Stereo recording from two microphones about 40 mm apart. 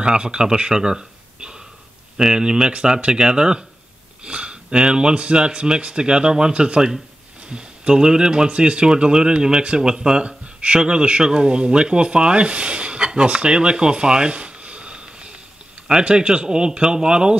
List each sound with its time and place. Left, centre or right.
0.0 s a man's voice: right